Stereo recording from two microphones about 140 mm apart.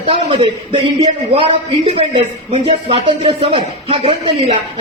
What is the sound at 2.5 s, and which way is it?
Speech, 45° right (ahead or behind).